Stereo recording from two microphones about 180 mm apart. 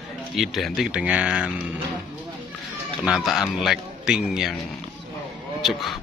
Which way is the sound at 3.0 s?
Centre (ahead or behind).